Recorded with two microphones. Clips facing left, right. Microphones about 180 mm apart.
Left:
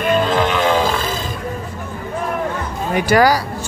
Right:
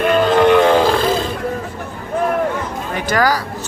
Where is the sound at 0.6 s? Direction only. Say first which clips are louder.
Right 4 dB; 60° right (ahead or behind).